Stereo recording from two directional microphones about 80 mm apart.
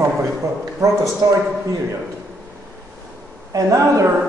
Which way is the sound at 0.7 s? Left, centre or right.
Right.